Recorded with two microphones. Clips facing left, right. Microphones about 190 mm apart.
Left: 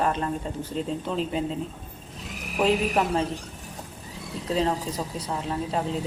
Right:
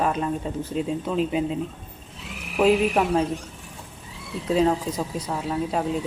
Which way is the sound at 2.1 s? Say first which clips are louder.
Even; 40° left (ahead or behind).